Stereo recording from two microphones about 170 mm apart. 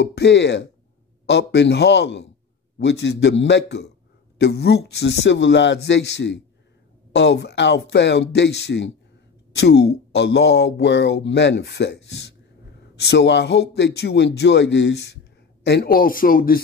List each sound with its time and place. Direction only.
0.0 s a man's voice: 80° left
9.6 s a man's voice: 75° left (ahead or behind)
15.6 s a man's voice: 70° left (ahead or behind)